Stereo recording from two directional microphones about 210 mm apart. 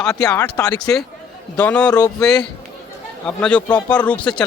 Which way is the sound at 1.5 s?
5° left (ahead or behind).